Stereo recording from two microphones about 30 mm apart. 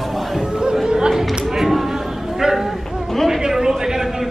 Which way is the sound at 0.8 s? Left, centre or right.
Right.